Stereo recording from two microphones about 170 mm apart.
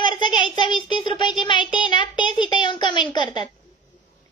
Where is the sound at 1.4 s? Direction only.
30° left (ahead or behind).